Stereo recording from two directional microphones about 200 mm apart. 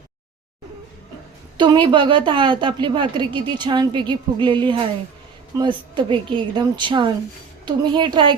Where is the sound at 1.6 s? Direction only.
20° right (ahead or behind).